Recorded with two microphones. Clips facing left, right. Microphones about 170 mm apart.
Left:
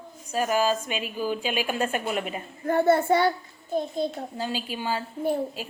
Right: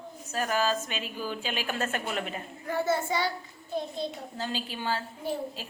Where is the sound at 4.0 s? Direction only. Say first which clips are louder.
Left 6 dB; 50° left (ahead or behind).